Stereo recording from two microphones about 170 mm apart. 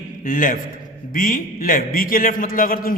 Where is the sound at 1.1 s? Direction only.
55° left (ahead or behind).